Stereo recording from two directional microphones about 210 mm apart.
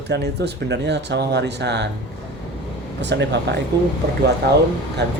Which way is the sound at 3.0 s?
55° right (ahead or behind).